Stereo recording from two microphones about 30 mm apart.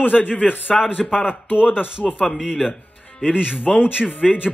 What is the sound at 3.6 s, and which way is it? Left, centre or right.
Speech, right.